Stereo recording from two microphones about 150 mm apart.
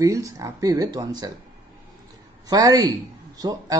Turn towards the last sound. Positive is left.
turn(degrees=-25)  # may be behind; listen again after turning